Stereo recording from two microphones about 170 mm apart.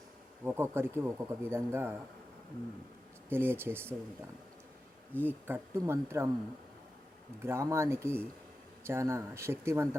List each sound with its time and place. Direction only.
0.4 s speech: 15° right (ahead or behind)
3.2 s speech: 15° right (ahead or behind)
5.2 s speech: 15° right (ahead or behind)
7.4 s speech: 15° right (ahead or behind)